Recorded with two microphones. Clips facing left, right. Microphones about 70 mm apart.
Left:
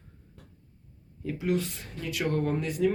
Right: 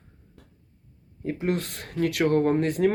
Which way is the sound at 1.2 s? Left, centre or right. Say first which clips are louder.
Right 3 dB; right.